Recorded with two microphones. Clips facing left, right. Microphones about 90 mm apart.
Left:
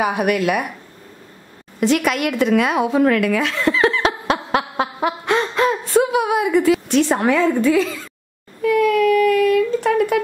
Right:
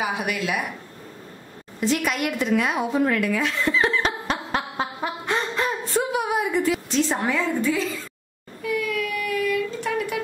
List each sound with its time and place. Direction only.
0.0 s a woman's voice: 55° left (ahead or behind)
1.8 s a sound: 70° left (ahead or behind)
8.6 s child singing: 55° left (ahead or behind)